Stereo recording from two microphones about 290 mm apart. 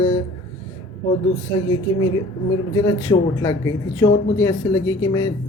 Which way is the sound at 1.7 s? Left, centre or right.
Centre.